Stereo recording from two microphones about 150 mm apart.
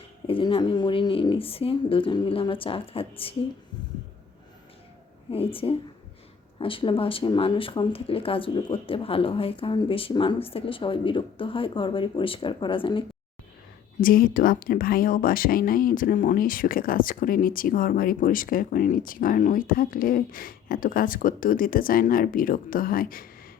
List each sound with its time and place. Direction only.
0.3 s speech: 35° left (ahead or behind)
5.3 s speech: 40° left (ahead or behind)
14.0 s speech: 70° left (ahead or behind)